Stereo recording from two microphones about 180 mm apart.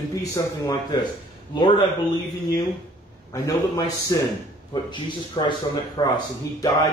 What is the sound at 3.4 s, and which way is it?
Speech, 20° left (ahead or behind).